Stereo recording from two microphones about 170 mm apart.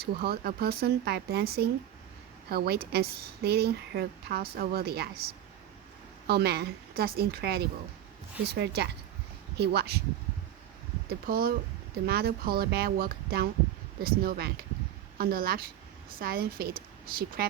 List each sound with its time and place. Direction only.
0.0 s speech: 65° right (ahead or behind)
6.2 s speech: 70° right (ahead or behind)
8.5 s speech: 85° right
9.6 s speech: 70° right (ahead or behind)
11.1 s a woman's voice: 65° right (ahead or behind)